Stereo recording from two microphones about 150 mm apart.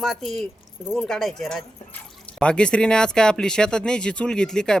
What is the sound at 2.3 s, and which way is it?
Speech, 5° left (ahead or behind).